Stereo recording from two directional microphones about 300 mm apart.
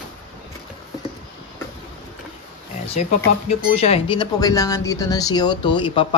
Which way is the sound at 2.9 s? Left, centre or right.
Left.